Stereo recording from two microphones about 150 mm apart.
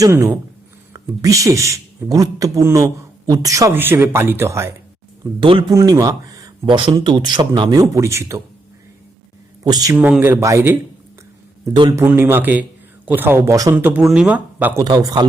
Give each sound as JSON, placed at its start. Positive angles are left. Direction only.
{"t": 0.0, "sound": "speech", "side_deg": -20}
{"t": 5.4, "sound": "speech", "side_deg": -35}
{"t": 5.7, "sound": "speech", "side_deg": -25}
{"t": 9.6, "sound": "speech", "side_deg": -25}
{"t": 9.9, "sound": "speech", "side_deg": -10}
{"t": 12.0, "sound": "speech", "side_deg": -15}
{"t": 13.7, "sound": "speech", "side_deg": -10}
{"t": 14.8, "sound": "speech", "side_deg": -25}